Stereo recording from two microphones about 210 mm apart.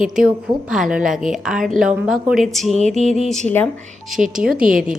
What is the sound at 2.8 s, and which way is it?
Music, 35° right (ahead or behind).